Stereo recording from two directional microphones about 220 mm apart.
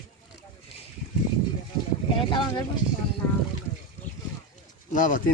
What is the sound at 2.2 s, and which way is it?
Speech, 20° left (ahead or behind).